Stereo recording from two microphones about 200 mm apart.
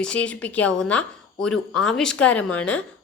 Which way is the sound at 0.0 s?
5° left (ahead or behind).